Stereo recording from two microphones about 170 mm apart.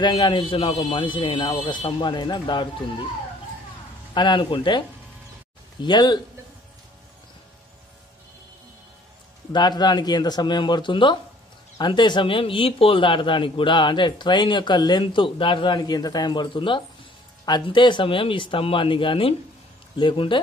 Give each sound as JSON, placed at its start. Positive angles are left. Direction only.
{"t": 0.0, "sound": "speech", "side_deg": 25}
{"t": 4.1, "sound": "speech", "side_deg": 25}
{"t": 9.5, "sound": "speech", "side_deg": 25}